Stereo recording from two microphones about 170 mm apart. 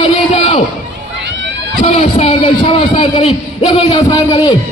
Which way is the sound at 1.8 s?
40° left (ahead or behind).